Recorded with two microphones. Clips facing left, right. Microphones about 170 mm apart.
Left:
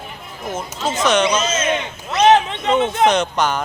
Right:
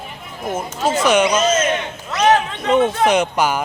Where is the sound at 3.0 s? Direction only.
10° right (ahead or behind).